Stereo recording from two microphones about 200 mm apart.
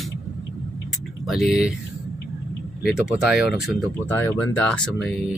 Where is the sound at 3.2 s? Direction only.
Centre (ahead or behind).